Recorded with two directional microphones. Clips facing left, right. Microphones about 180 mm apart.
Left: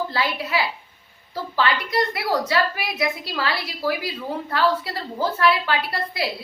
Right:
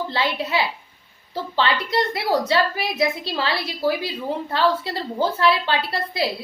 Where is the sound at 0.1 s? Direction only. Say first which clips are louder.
Right 1 dB; 25° right (ahead or behind).